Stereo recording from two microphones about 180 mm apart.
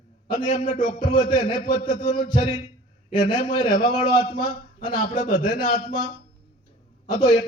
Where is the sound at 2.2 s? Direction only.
25° left (ahead or behind).